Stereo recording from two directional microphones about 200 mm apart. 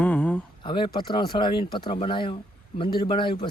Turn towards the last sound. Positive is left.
turn(degrees=25)  # may be behind; listen again after turning